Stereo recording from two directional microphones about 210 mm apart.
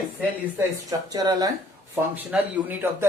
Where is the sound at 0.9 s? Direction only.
15° right (ahead or behind).